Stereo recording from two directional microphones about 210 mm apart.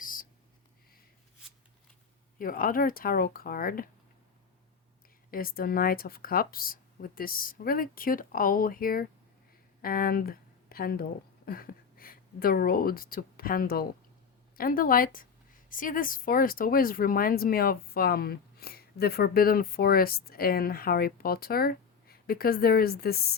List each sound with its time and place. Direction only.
0.0 s whispering: 40° left (ahead or behind)
2.4 s speech: 40° left (ahead or behind)
5.3 s speech: 45° left (ahead or behind)